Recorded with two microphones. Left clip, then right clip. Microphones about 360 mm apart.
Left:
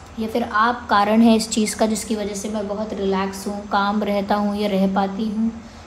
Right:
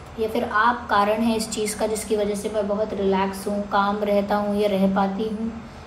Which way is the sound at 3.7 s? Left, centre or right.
Left.